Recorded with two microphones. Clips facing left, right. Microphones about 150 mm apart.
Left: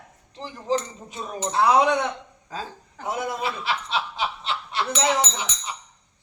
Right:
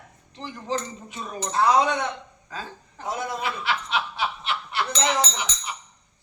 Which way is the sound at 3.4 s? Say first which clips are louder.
Even; 30° left (ahead or behind).